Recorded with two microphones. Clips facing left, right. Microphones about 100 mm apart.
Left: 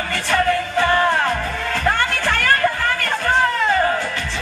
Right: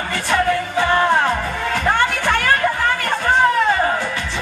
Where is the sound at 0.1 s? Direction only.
15° right (ahead or behind).